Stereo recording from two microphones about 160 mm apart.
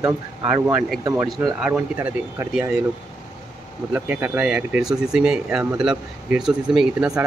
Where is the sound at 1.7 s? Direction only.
15° right (ahead or behind).